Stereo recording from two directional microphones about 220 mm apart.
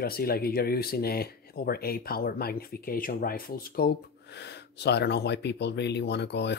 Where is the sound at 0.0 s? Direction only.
45° left (ahead or behind).